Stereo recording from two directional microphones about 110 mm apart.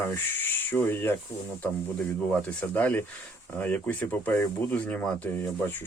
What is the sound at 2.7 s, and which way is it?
Speech, 15° left (ahead or behind).